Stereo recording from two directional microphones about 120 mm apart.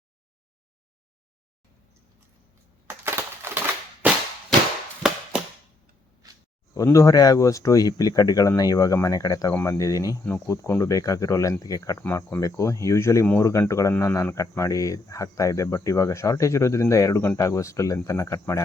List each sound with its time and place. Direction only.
2.8 s typewriter: 20° right (ahead or behind)
5.0 s a sound: 5° right (ahead or behind)
6.7 s speech: 25° left (ahead or behind)
9.5 s speech: 15° left (ahead or behind)
9.7 s speech: 30° left (ahead or behind)
11.9 s speech: 15° left (ahead or behind)